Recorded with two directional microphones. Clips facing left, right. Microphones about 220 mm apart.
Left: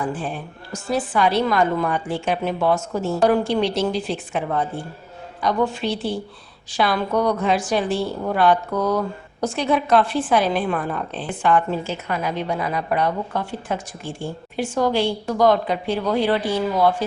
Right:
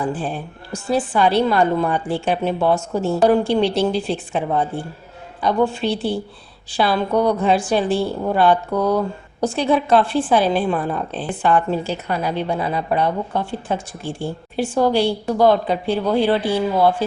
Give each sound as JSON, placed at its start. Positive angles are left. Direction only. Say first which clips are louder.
{"t": 0.0, "sound": "a woman's voice", "louder": "right 3 dB", "side_deg": -30}